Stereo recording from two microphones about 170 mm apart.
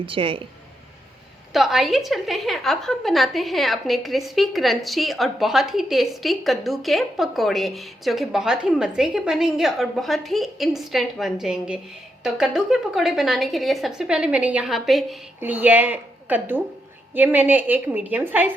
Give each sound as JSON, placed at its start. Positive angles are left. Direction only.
{"t": 0.0, "sound": "speech", "side_deg": -30}
{"t": 1.5, "sound": "a woman's voice", "side_deg": 0}